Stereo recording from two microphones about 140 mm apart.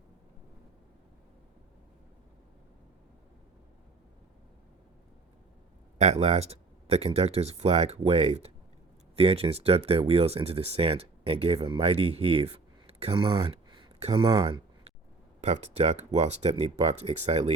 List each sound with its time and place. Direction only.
6.0 s speech: 50° right (ahead or behind); by 14.9 s 35° right (ahead or behind)
15.4 s speech: 55° right (ahead or behind)